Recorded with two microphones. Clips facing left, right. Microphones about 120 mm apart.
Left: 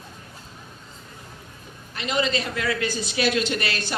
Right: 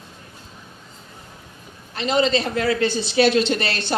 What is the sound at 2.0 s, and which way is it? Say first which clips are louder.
Speech: right 6 dB; 30° right (ahead or behind).